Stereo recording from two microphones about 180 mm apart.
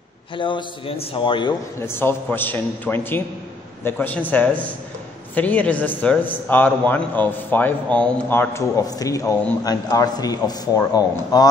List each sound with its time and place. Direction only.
0.4 s a man's voice: 25° left (ahead or behind)
1.8 s a man's voice: 15° left (ahead or behind)